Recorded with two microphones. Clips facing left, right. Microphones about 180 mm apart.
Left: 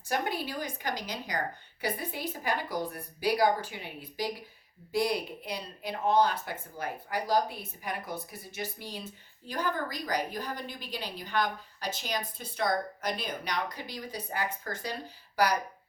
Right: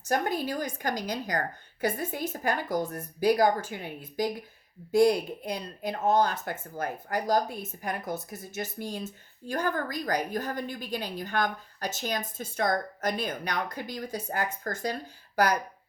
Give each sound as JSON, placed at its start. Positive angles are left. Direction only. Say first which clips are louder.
{"t": 0.1, "sound": "speech", "louder": "right 4 dB", "side_deg": -45}